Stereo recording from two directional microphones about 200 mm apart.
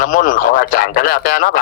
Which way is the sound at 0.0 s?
40° left (ahead or behind).